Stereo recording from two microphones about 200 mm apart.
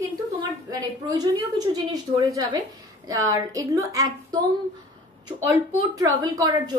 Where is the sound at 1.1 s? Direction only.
20° right (ahead or behind).